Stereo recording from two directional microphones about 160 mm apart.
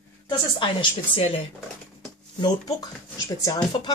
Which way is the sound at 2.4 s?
25° left (ahead or behind).